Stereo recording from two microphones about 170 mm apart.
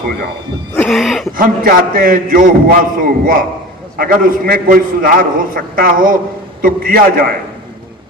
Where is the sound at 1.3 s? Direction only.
55° right (ahead or behind).